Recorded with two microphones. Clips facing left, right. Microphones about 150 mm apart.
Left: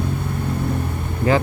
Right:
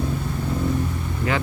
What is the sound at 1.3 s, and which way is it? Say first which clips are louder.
Speech: left 7 dB; 35° left (ahead or behind).